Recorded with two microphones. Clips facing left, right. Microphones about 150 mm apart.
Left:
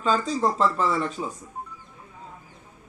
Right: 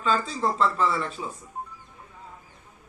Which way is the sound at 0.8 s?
40° left (ahead or behind).